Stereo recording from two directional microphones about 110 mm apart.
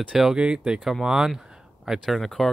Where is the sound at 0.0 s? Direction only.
5° right (ahead or behind).